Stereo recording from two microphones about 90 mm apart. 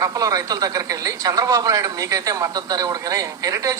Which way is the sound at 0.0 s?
40° right (ahead or behind).